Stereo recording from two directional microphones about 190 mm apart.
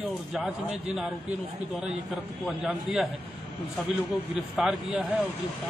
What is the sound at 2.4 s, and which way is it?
Speech, centre (ahead or behind).